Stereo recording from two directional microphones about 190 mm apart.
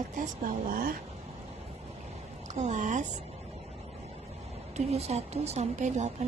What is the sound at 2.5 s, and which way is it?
Speech, 40° right (ahead or behind).